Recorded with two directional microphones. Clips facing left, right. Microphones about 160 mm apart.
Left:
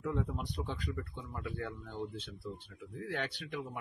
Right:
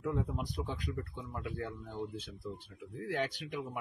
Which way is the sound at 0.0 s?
5° right (ahead or behind).